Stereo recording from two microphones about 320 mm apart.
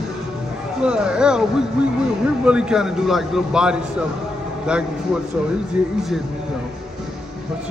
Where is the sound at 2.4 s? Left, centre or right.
Centre.